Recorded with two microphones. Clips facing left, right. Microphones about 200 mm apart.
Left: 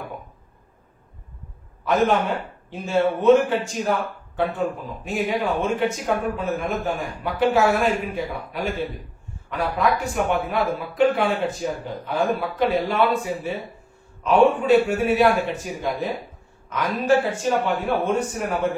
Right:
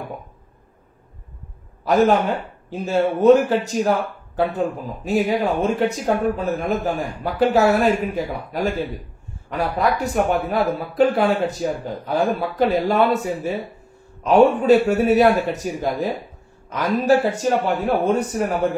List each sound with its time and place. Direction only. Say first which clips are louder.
1.9 s speech: right 3 dB; 40° right (ahead or behind)